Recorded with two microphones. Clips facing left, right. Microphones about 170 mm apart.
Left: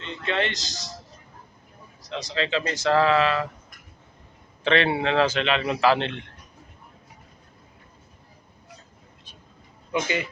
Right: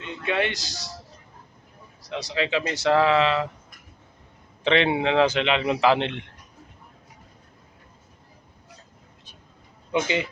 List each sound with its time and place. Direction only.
0.0 s a man's voice: 10° right (ahead or behind)
0.7 s a man's voice: 20° left (ahead or behind)
2.3 s a man's voice: 15° right (ahead or behind)
4.6 s a man's voice: 20° right (ahead or behind)
9.9 s a man's voice: 20° right (ahead or behind)